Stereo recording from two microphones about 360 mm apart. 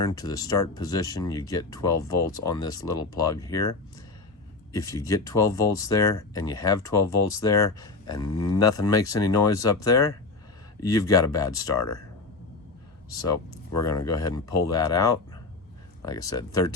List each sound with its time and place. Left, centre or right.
0.0 s speech: centre
4.7 s speech: centre
8.3 s speech: left
8.5 s speech: centre
13.7 s speech: centre